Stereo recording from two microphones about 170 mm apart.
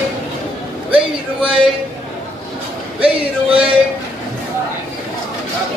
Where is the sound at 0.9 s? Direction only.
5° right (ahead or behind).